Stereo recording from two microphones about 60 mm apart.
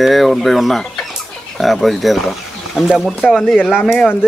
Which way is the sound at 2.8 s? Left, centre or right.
Centre.